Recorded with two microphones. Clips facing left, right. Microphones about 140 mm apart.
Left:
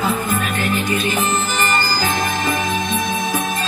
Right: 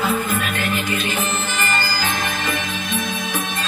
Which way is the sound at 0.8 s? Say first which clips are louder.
Left 4 dB; 40° left (ahead or behind).